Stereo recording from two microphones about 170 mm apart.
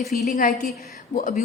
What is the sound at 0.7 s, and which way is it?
Speech, 60° left (ahead or behind).